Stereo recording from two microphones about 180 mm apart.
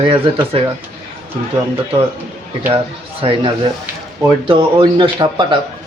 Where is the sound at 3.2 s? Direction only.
30° right (ahead or behind).